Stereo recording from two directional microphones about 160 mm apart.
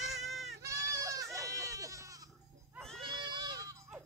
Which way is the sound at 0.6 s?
20° right (ahead or behind).